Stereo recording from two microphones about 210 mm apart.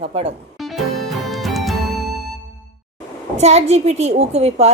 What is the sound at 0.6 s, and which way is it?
Music, centre (ahead or behind).